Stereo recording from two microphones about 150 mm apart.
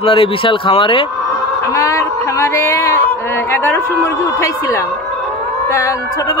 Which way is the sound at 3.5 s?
15° left (ahead or behind).